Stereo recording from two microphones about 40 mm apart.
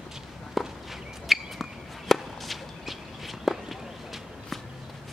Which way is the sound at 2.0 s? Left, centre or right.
Centre.